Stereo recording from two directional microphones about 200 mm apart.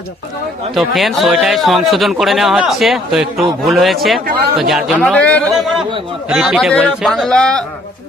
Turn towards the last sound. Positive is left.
turn(degrees=5)  # may be behind; listen again after turning